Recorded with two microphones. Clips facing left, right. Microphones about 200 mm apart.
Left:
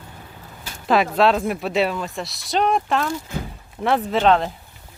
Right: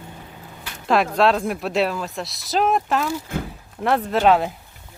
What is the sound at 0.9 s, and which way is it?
Speech, centre (ahead or behind).